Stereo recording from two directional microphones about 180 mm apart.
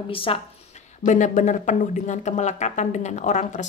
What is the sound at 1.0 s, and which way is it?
Speech, 45° left (ahead or behind).